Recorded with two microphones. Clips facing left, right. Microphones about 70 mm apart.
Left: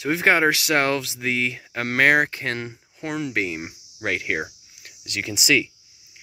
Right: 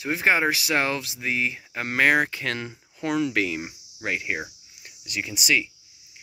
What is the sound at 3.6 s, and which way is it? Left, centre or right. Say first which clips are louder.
Cricket: left 1 dB; left.